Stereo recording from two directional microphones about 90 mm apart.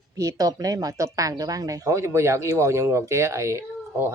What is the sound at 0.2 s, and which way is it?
Speech, 40° right (ahead or behind).